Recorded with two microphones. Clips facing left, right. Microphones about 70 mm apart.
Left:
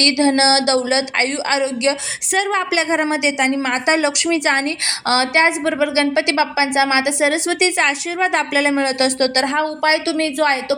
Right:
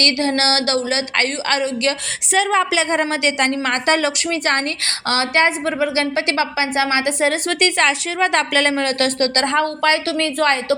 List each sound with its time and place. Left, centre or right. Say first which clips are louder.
0.0 s a woman's voice: left 4 dB; left
2.3 s a woman's voice: right 1 dB; centre